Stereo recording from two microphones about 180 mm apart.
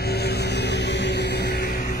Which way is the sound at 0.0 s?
65° left (ahead or behind).